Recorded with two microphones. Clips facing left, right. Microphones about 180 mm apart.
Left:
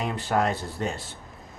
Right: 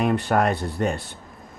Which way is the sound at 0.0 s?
60° right (ahead or behind).